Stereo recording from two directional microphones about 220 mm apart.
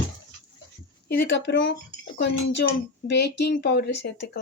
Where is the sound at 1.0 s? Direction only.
50° left (ahead or behind).